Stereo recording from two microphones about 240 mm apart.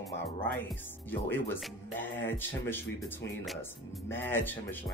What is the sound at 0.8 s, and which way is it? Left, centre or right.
Speech, centre.